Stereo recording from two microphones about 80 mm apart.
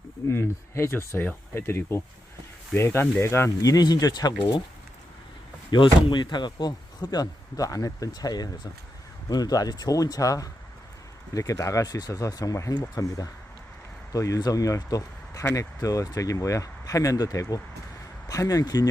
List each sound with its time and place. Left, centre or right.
0.3 s speech: left
3.6 s speech: left
5.7 s speech: left